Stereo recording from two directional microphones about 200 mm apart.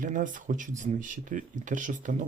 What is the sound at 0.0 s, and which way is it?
Speech, 40° right (ahead or behind).